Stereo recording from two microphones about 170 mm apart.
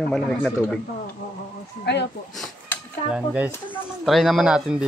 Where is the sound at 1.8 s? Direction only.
85° left.